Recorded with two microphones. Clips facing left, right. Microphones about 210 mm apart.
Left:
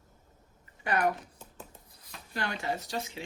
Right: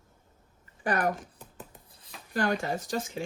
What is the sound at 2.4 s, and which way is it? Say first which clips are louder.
Speech: right 6 dB; 45° right (ahead or behind).